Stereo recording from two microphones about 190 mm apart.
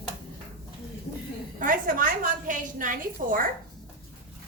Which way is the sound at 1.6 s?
45° right (ahead or behind).